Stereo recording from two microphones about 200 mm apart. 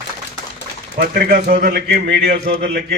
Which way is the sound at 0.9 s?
50° right (ahead or behind).